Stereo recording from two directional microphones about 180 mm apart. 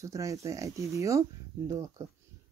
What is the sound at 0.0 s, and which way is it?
Speech, 15° right (ahead or behind).